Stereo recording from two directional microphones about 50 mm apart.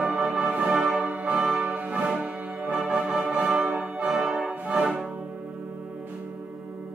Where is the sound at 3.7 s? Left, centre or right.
Right.